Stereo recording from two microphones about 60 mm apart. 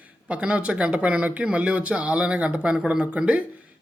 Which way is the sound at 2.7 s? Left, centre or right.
Centre.